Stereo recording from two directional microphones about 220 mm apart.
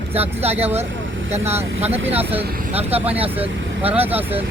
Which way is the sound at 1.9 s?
25° right (ahead or behind).